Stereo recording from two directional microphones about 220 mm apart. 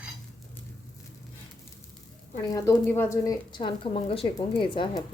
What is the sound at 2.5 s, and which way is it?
A woman's voice, 15° left (ahead or behind).